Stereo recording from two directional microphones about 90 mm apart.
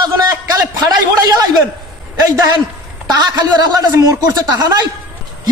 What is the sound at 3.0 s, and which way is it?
A man's voice, 50° right (ahead or behind).